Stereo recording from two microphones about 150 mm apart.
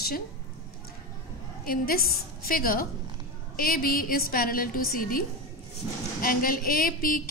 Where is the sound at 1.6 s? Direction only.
75° left (ahead or behind).